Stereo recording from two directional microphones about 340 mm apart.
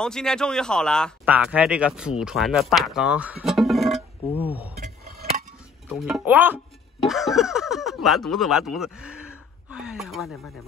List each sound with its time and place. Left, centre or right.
0.0 s speech: centre
4.7 s dishes: right
5.9 s speech: centre